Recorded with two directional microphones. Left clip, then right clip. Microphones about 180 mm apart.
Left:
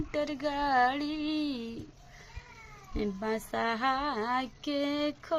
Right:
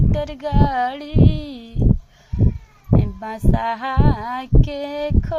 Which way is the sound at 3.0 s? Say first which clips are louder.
Right 6 dB; 20° right (ahead or behind).